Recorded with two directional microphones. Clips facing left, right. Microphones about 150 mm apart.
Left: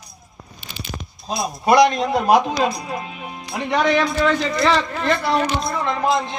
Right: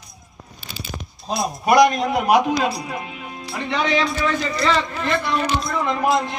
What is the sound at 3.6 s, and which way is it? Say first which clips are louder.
Speech: left 3 dB; 60° left (ahead or behind).